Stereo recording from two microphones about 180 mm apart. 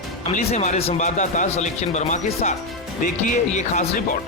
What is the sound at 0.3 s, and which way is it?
Speech, 40° left (ahead or behind).